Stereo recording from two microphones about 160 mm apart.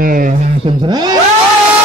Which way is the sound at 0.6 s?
25° right (ahead or behind).